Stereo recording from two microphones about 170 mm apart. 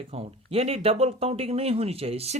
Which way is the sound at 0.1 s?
35° right (ahead or behind).